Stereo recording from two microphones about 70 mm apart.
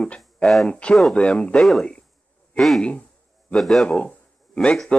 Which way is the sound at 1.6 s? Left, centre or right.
Centre.